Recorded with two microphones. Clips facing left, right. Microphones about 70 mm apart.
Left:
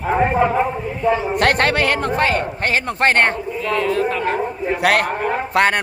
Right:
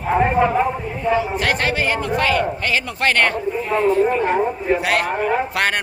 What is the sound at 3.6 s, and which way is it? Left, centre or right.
Speech, left.